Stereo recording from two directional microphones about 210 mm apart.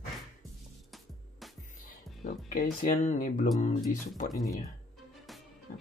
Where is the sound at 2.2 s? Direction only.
40° left (ahead or behind).